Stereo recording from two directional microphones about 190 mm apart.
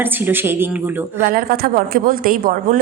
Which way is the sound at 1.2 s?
50° right (ahead or behind).